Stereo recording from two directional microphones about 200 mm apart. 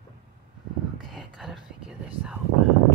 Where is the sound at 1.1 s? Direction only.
Centre (ahead or behind).